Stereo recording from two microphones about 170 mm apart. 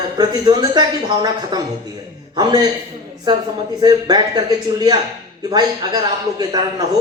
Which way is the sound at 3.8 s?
25° right (ahead or behind).